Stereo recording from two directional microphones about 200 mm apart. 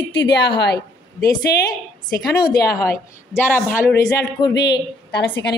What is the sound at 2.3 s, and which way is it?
A woman's voice, 20° left (ahead or behind).